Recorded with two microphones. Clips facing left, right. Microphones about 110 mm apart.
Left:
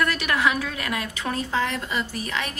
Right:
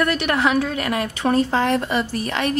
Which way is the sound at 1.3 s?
55° right (ahead or behind).